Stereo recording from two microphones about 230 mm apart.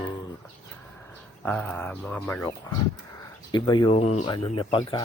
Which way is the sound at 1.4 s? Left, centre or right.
Centre.